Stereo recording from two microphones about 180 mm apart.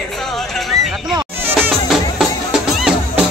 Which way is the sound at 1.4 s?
5° right (ahead or behind).